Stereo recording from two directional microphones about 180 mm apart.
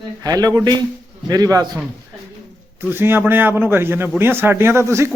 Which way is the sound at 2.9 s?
10° right (ahead or behind).